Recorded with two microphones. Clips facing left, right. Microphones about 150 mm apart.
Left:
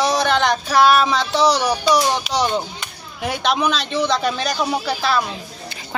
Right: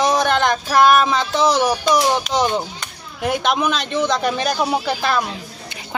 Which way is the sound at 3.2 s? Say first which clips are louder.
Right 1 dB; 5° right (ahead or behind).